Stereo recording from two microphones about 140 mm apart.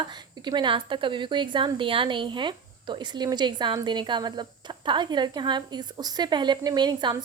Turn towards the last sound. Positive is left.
turn(degrees=-30)  # may be behind; listen again after turning